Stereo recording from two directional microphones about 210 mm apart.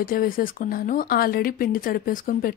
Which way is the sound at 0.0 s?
45° left (ahead or behind).